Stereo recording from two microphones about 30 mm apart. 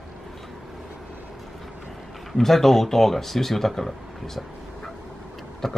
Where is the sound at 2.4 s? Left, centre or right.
Centre.